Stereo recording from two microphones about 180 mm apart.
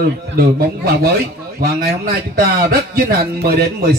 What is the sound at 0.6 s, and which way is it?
Speech, 60° right (ahead or behind).